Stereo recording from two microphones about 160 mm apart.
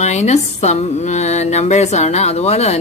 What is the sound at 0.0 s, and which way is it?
A woman's voice, 45° left (ahead or behind).